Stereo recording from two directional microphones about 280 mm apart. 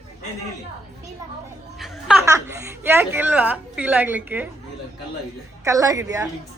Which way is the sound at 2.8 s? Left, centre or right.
Centre.